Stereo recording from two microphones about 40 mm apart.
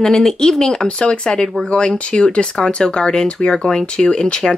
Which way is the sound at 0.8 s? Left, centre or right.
Left.